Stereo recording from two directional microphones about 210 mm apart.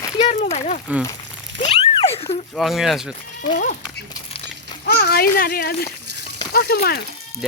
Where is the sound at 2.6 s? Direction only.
Centre (ahead or behind).